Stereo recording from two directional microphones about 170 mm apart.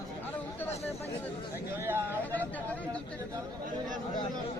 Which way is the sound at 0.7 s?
40° left (ahead or behind).